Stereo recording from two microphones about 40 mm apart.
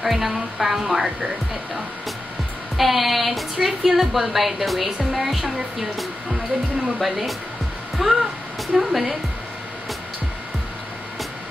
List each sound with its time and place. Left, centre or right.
0.0 s a woman's voice: centre
2.8 s a woman's voice: centre